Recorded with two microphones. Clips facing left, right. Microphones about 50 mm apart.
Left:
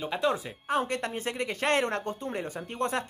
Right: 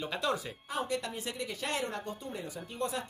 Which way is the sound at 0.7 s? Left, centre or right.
Left.